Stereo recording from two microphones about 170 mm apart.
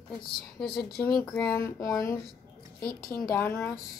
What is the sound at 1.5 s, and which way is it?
Speech, 15° left (ahead or behind).